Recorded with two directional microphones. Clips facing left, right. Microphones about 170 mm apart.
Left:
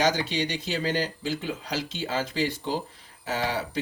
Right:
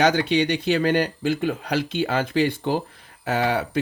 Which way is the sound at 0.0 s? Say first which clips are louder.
Right 6 dB; 60° right (ahead or behind).